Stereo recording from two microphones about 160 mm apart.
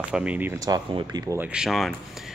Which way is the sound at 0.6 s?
25° right (ahead or behind).